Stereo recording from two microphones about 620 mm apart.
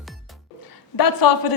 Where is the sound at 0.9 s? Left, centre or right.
Left.